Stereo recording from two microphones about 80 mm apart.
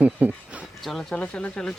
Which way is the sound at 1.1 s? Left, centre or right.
Centre.